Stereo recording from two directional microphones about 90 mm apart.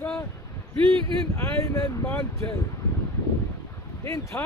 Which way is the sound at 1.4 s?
30° left (ahead or behind).